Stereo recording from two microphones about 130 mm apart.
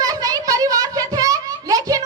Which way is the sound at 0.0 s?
30° right (ahead or behind).